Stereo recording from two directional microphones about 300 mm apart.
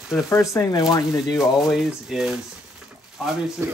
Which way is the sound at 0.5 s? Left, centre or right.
Centre.